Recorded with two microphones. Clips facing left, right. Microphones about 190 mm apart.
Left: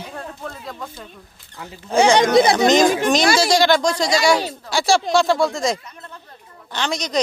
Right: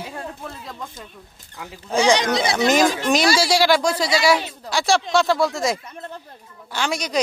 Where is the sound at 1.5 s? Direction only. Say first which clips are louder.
Even; 15° right (ahead or behind).